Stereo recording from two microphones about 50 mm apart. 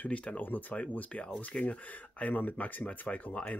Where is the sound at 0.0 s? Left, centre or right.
Left.